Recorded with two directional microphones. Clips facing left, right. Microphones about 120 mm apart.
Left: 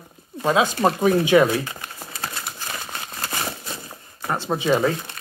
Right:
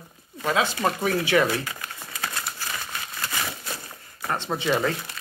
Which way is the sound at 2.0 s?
35° left (ahead or behind).